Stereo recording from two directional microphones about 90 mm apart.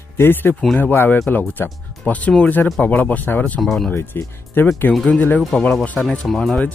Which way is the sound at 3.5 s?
5° left (ahead or behind).